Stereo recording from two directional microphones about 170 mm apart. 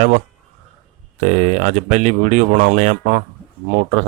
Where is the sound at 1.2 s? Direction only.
40° right (ahead or behind).